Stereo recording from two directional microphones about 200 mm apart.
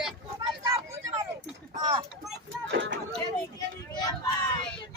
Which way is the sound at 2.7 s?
65° right (ahead or behind).